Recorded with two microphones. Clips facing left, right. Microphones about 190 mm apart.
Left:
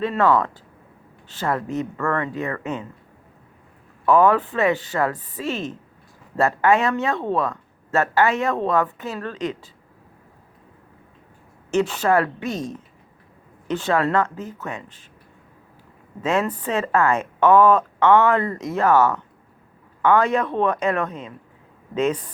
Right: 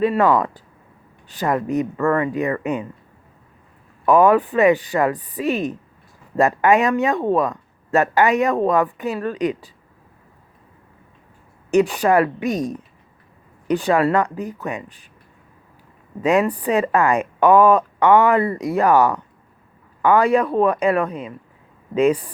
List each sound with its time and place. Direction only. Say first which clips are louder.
0.0 s speech: right 3 dB; 15° right (ahead or behind)
4.0 s speech: right 3 dB; 15° right (ahead or behind)
11.7 s speech: right 3 dB; 15° right (ahead or behind)
16.2 s speech: right 5 dB; 15° right (ahead or behind)